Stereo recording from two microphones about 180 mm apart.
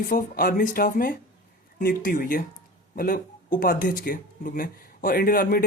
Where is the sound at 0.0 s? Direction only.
50° left (ahead or behind).